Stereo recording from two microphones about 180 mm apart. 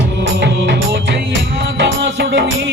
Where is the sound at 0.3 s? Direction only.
75° right (ahead or behind).